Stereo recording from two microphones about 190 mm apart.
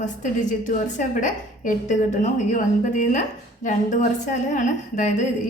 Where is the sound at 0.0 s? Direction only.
40° left (ahead or behind).